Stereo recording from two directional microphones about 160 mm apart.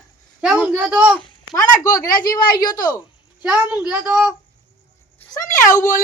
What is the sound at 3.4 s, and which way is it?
Speech, 5° right (ahead or behind).